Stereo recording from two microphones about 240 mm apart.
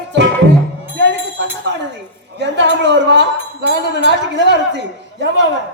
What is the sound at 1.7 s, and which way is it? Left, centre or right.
Speech, right.